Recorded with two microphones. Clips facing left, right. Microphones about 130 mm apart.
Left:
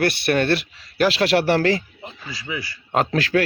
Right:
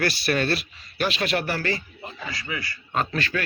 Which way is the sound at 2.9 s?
85° left.